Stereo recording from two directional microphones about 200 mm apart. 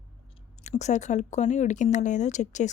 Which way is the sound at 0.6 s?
35° left (ahead or behind).